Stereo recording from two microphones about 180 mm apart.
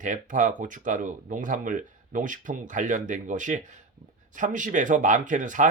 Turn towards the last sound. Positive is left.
turn(degrees=-45)  # may be behind; listen again after turning